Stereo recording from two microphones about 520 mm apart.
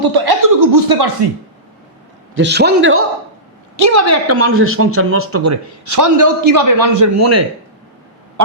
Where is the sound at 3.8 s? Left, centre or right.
Right.